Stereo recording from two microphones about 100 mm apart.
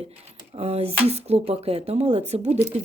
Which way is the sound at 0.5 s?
90° right.